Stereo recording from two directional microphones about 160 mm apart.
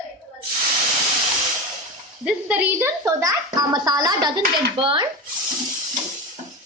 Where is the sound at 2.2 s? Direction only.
10° right (ahead or behind).